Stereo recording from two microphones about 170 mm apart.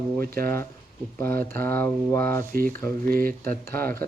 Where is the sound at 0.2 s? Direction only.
60° right (ahead or behind).